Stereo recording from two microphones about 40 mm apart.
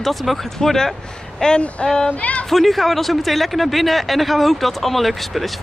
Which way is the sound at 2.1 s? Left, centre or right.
Left.